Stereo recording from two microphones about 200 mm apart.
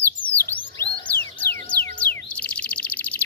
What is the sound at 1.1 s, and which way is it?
Music, 50° left (ahead or behind).